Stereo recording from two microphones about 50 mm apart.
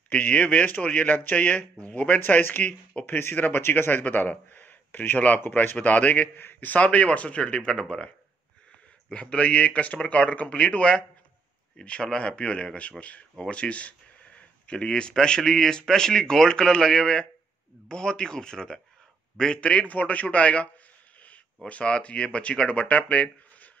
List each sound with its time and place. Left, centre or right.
0.1 s a man's voice: left
3.1 s speech: left
3.3 s speech: left
3.6 s speech: left
5.4 s speech: left
5.8 s a man's voice: left
9.1 s a man's voice: left